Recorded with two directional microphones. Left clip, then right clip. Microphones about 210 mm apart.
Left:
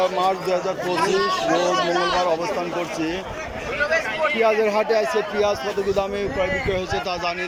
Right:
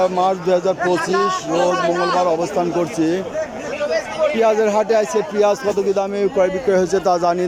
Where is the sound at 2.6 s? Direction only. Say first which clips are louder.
Right 6 dB; 20° right (ahead or behind).